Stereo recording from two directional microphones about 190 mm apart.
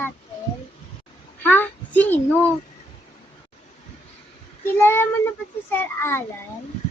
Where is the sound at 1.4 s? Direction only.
10° left (ahead or behind).